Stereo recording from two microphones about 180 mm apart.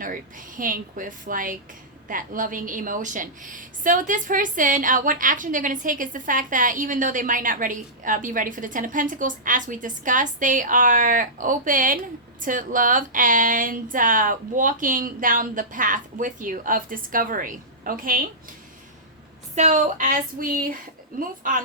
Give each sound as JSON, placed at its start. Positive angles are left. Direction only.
{"t": 0.0, "sound": "a woman's voice", "side_deg": -50}
{"t": 19.5, "sound": "a woman's voice", "side_deg": -40}